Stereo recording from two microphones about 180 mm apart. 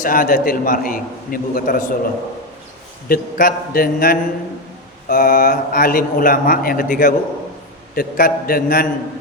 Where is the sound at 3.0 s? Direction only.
50° left (ahead or behind).